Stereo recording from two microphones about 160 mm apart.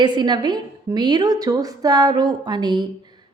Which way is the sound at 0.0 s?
30° right (ahead or behind).